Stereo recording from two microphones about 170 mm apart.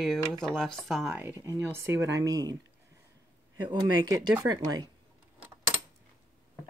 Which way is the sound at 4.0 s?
25° right (ahead or behind).